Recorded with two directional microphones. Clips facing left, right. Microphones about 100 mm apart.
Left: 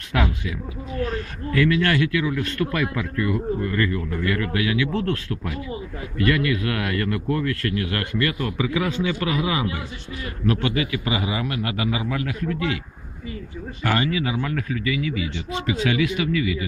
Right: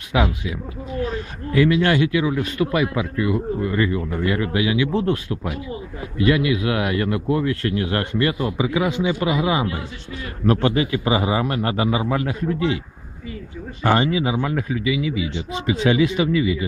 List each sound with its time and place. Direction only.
0.1 s a man's voice: 10° right (ahead or behind); by 12.8 s 30° right (ahead or behind)
13.8 s a man's voice: 25° right (ahead or behind)